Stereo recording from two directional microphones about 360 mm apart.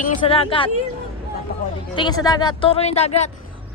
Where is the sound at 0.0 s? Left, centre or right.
Centre.